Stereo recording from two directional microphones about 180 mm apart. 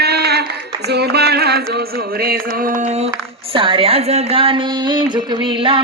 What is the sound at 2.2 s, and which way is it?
Mantra, 55° right (ahead or behind).